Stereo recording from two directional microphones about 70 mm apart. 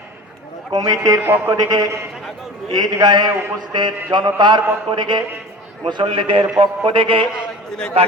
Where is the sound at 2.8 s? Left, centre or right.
Right.